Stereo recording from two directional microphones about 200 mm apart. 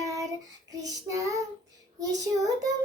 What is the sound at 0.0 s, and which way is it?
Child singing, 15° right (ahead or behind).